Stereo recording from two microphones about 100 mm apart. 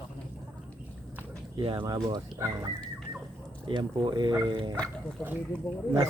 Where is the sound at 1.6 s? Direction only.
55° right (ahead or behind).